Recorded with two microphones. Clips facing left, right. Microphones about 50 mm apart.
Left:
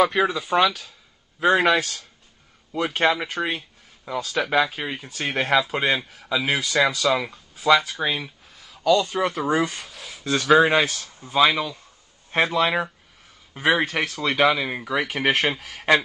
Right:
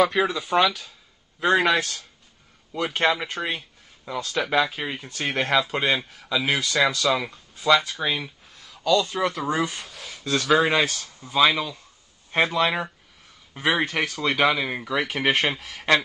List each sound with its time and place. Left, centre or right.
0.0 s speech: centre
10.3 s speech: centre